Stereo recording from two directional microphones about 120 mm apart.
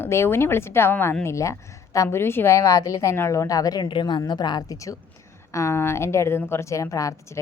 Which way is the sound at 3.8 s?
40° left (ahead or behind).